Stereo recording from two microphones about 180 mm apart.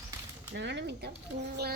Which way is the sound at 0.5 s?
75° right (ahead or behind).